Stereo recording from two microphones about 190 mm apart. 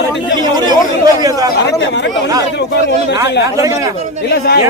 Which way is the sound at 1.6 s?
70° left (ahead or behind).